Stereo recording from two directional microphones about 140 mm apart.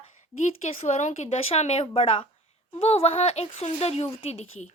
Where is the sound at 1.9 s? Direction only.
40° left (ahead or behind).